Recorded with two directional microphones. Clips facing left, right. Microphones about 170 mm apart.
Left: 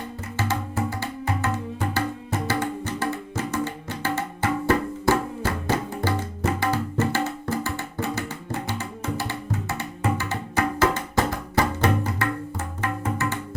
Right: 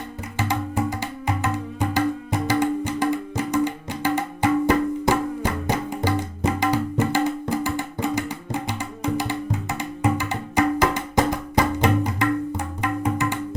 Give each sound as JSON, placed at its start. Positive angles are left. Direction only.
{"t": 0.3, "sound": "music", "side_deg": -15}